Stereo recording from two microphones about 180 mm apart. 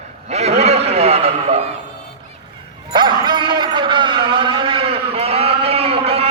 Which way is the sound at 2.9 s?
25° right (ahead or behind).